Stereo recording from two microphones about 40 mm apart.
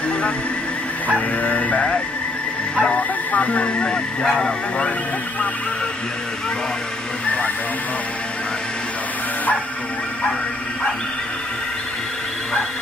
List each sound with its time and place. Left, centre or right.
1.4 s music: left
2.8 s speech: left
4.2 s speech: centre